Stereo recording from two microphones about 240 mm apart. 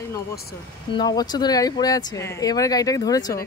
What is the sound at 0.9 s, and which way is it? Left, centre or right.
Speech, centre.